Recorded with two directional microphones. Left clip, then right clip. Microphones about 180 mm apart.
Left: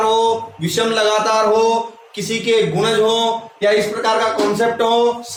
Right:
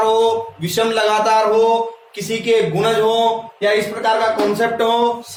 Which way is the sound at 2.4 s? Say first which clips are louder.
Even; 15° right (ahead or behind).